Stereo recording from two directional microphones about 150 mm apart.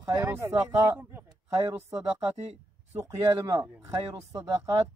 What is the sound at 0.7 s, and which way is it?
Speech, 15° right (ahead or behind).